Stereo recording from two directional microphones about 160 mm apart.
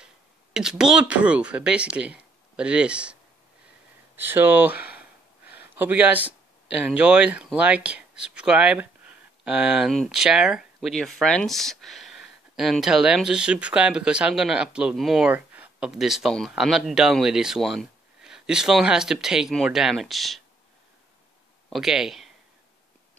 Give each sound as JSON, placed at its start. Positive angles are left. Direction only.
{"t": 0.0, "sound": "speech", "side_deg": -5}
{"t": 4.2, "sound": "speech", "side_deg": -15}
{"t": 4.7, "sound": "a sound", "side_deg": 80}
{"t": 5.8, "sound": "speech", "side_deg": -10}
{"t": 21.6, "sound": "speech", "side_deg": 0}